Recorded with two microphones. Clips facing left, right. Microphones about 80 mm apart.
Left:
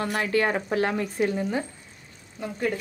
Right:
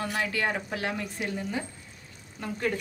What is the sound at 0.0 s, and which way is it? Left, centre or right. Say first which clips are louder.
Speech: left 5 dB; left.